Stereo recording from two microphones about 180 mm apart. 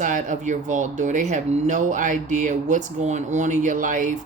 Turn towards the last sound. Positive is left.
turn(degrees=-45)  # may be behind; listen again after turning